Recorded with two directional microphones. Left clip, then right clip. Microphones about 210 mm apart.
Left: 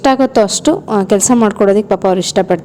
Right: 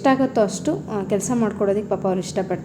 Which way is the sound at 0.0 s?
40° left (ahead or behind).